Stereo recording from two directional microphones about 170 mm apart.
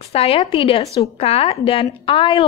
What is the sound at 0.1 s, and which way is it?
A woman's voice, 35° left (ahead or behind).